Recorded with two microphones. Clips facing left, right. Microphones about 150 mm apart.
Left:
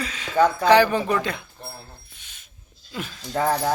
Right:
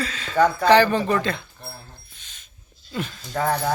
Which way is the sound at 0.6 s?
10° left (ahead or behind).